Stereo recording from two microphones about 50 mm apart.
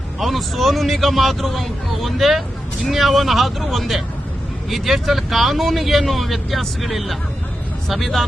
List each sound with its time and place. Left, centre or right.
0.2 s speech: centre